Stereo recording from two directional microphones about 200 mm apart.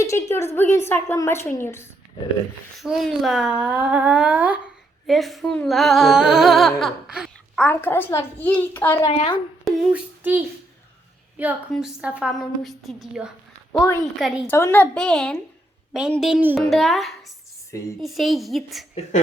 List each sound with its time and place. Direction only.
0.0 s a woman's voice: 15° left (ahead or behind)
2.8 s speech: centre (ahead or behind)
7.6 s a woman's voice: 10° left (ahead or behind)
9.0 s speech: 25° left (ahead or behind)
9.6 s a child's voice: 5° right (ahead or behind)
14.5 s speech: 10° left (ahead or behind)